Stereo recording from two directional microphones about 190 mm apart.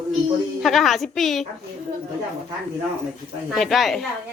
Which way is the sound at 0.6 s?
Centre (ahead or behind).